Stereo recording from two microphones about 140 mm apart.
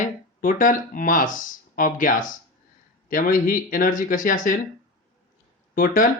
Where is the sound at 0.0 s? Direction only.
70° left (ahead or behind).